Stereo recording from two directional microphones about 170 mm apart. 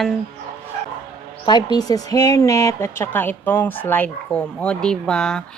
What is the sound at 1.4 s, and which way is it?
Speech, 25° left (ahead or behind).